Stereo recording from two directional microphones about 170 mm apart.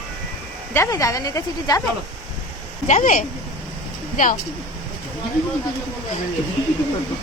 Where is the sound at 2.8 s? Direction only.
45° left (ahead or behind).